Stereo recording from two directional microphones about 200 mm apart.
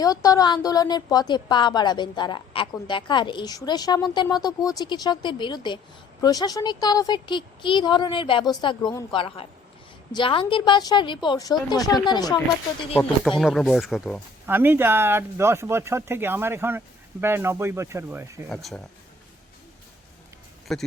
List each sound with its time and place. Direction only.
0.0 s a woman's voice: 15° left (ahead or behind)
13.4 s speech: centre (ahead or behind)
18.4 s speech: centre (ahead or behind)
20.7 s speech: centre (ahead or behind)